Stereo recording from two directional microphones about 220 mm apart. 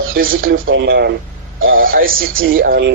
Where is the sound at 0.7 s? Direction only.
55° right (ahead or behind).